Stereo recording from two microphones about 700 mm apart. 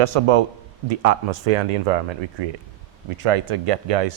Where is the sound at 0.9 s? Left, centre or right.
Right.